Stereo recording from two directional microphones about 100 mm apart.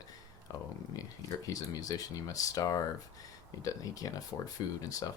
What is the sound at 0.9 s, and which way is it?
Speech, 35° left (ahead or behind).